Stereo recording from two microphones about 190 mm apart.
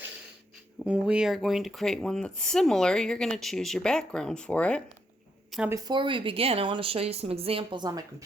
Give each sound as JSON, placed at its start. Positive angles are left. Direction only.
{"t": 0.9, "sound": "speech", "side_deg": -5}
{"t": 5.5, "sound": "a sound", "side_deg": -5}
{"t": 5.7, "sound": "speech", "side_deg": -20}